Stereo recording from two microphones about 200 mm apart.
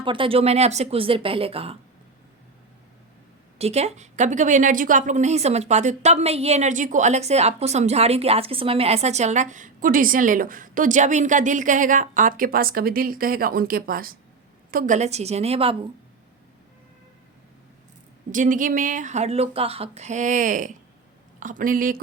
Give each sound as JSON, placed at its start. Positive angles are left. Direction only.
{"t": 0.0, "sound": "speech", "side_deg": -25}
{"t": 3.6, "sound": "a woman's voice", "side_deg": -30}
{"t": 18.3, "sound": "a woman's voice", "side_deg": -40}